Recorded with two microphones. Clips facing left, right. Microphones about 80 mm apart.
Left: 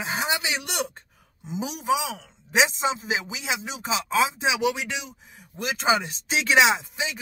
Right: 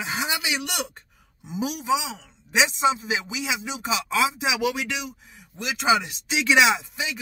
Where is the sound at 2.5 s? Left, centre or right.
Left.